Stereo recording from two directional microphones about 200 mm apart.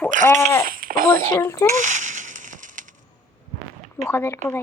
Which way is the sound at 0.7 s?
45° right (ahead or behind).